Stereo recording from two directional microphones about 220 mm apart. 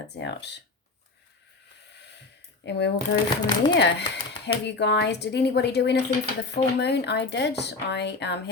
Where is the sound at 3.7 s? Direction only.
50° left (ahead or behind).